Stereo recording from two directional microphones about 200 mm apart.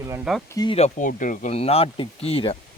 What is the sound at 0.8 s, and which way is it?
Speech, 35° left (ahead or behind).